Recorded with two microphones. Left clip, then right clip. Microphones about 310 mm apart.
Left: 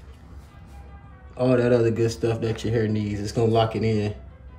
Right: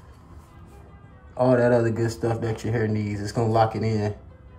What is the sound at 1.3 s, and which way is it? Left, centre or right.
Speech, centre.